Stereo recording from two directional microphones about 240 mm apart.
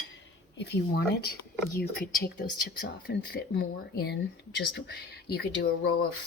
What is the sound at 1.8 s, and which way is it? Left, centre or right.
A woman's voice, left.